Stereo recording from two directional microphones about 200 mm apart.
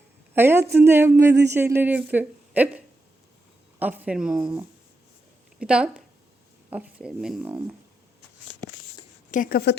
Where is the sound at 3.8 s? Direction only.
10° right (ahead or behind).